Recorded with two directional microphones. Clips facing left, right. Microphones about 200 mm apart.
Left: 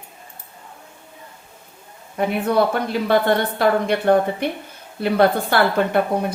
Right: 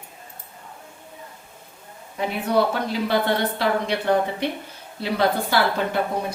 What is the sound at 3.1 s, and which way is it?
A woman's voice, 50° left (ahead or behind).